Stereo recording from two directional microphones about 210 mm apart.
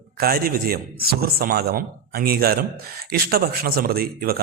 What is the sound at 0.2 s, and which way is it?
A man's voice, 45° right (ahead or behind).